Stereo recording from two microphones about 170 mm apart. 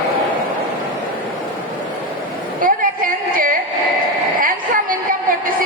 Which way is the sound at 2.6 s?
55° right (ahead or behind).